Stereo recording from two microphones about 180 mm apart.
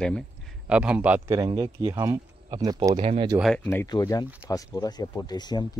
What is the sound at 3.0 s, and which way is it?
Speech, 35° right (ahead or behind).